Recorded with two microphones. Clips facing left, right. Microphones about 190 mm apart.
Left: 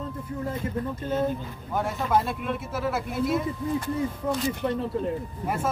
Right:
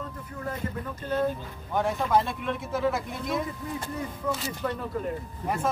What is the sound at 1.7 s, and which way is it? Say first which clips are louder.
Speech: right 1 dB; 5° left (ahead or behind).